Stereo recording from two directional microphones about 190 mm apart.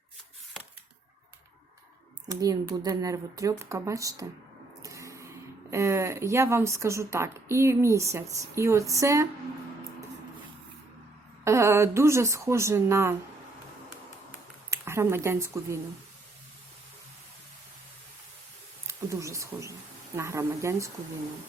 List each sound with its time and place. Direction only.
2.2 s speech: 20° right (ahead or behind)
4.8 s a sound: 15° right (ahead or behind)
5.7 s speech: 15° right (ahead or behind)
11.4 s speech: 15° right (ahead or behind)
14.7 s speech: 15° right (ahead or behind)
18.9 s speech: 15° right (ahead or behind)